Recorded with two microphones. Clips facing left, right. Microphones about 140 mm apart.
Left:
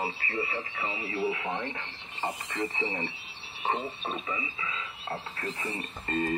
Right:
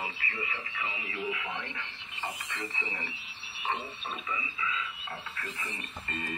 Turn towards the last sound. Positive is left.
turn(degrees=40)  # may be behind; listen again after turning